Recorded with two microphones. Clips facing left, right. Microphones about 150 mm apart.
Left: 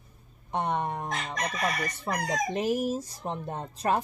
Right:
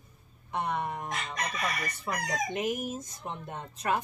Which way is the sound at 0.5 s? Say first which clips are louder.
Left 3 dB; 35° left (ahead or behind).